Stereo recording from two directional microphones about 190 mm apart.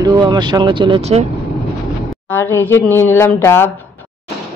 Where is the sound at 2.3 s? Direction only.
10° left (ahead or behind).